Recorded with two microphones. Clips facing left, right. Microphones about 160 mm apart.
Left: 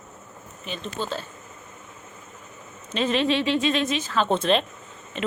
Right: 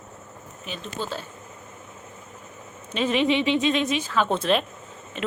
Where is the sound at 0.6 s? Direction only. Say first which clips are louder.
Left 1 dB; 5° right (ahead or behind).